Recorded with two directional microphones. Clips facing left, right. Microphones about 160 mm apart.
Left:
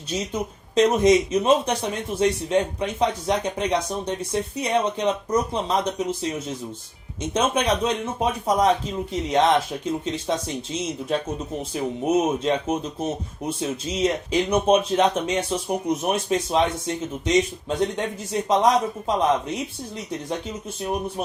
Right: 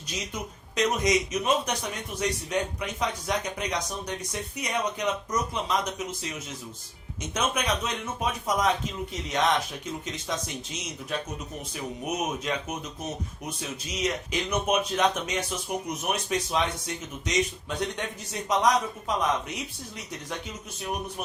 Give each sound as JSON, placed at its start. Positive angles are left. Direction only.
{"t": 0.8, "sound": "speech", "side_deg": 30}